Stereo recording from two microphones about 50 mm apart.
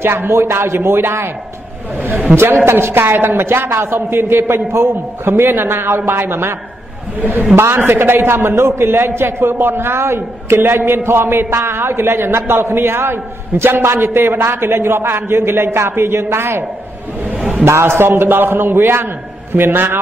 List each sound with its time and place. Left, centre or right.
0.0 s a man's voice: right
2.0 s speech: right
2.3 s a man's voice: right
7.2 s speech: right
7.5 s a man's voice: right
8.4 s a man's voice: right
17.4 s a sound: right
17.6 s a man's voice: right